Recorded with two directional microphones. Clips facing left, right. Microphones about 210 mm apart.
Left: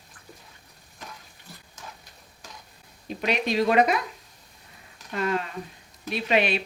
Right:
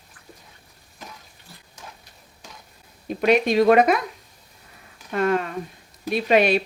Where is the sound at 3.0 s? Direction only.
50° right (ahead or behind).